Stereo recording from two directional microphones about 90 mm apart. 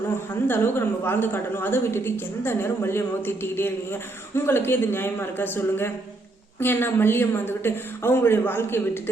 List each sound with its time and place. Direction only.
0.4 s a woman's voice: 25° left (ahead or behind)